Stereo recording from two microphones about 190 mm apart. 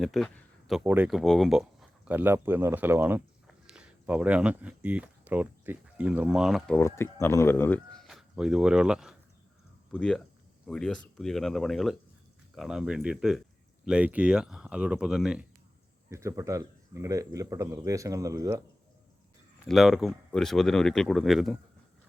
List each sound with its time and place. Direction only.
0.0 s a sound: centre (ahead or behind)
0.9 s speech: 5° right (ahead or behind)
6.7 s speech: 15° left (ahead or behind)
8.0 s speech: centre (ahead or behind)
16.0 s speech: 15° right (ahead or behind)
19.6 s speech: centre (ahead or behind)